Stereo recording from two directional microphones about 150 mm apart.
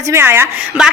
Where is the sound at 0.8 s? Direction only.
5° right (ahead or behind).